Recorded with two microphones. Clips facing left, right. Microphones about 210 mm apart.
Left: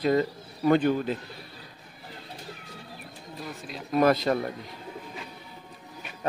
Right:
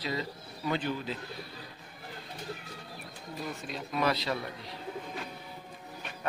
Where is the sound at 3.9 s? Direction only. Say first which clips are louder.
Left 9 dB; 50° left (ahead or behind).